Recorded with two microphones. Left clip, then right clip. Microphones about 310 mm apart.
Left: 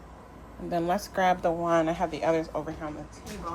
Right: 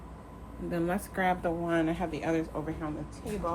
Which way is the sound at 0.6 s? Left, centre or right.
Centre.